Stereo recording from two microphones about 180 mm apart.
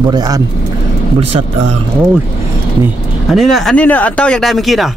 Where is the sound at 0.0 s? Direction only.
20° right (ahead or behind).